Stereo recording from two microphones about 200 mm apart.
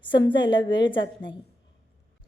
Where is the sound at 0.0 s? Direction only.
25° left (ahead or behind).